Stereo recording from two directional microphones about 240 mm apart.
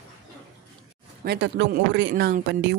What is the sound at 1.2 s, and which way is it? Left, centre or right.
Speech, right.